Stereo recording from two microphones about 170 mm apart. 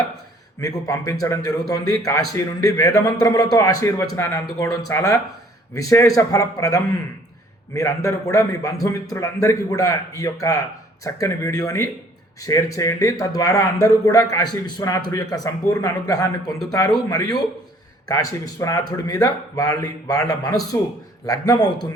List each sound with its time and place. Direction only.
0.6 s a man's voice: 20° left (ahead or behind)